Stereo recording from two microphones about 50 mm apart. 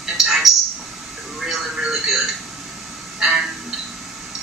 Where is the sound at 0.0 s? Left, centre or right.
Centre.